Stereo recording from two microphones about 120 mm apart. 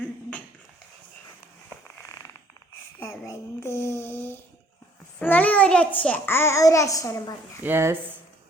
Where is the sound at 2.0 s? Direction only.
25° left (ahead or behind).